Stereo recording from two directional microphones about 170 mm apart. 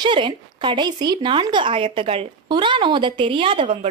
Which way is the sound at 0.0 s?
25° right (ahead or behind).